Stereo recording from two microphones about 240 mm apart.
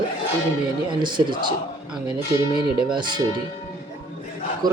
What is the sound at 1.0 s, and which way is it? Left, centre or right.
Speech, centre.